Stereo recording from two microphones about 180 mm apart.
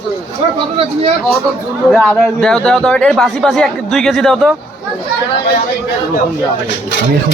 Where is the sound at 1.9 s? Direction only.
5° left (ahead or behind).